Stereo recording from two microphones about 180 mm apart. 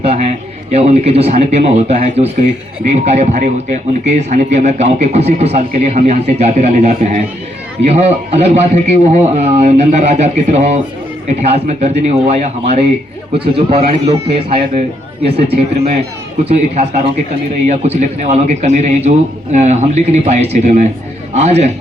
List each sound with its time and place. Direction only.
0.0 s speech: 35° right (ahead or behind)
13.7 s speech: 35° right (ahead or behind)